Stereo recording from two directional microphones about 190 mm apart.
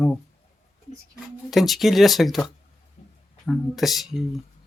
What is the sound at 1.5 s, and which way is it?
Speech, centre (ahead or behind).